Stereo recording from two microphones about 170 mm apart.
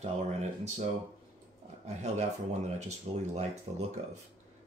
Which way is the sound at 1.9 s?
40° right (ahead or behind).